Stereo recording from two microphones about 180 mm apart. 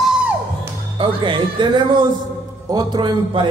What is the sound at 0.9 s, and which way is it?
Speech, 25° right (ahead or behind).